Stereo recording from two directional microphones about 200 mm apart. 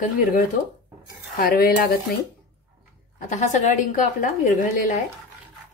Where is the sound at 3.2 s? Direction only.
40° left (ahead or behind).